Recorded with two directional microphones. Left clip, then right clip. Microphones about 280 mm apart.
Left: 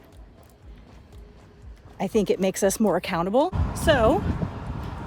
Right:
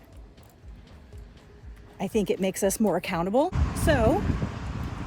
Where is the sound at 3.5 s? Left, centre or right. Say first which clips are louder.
Left 1 dB; left.